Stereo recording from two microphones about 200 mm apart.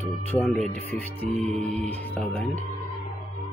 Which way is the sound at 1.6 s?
35° right (ahead or behind).